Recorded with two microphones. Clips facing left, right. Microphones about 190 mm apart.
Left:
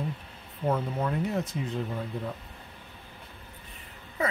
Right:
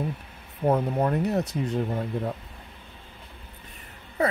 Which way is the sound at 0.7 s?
40° right (ahead or behind).